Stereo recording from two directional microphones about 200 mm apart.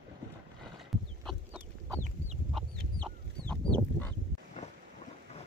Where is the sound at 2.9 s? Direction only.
20° right (ahead or behind).